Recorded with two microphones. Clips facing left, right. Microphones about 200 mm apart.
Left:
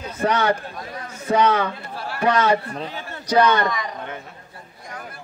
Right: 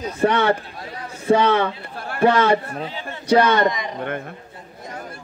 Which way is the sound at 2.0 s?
50° right (ahead or behind).